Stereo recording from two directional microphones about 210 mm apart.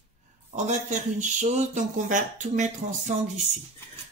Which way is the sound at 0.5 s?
35° right (ahead or behind).